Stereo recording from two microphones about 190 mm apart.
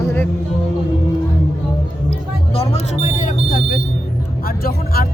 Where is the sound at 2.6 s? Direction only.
35° left (ahead or behind).